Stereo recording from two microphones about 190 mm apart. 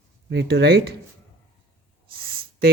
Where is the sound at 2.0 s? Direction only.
50° right (ahead or behind).